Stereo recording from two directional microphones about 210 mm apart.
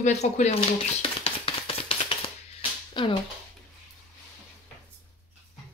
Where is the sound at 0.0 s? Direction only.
35° left (ahead or behind).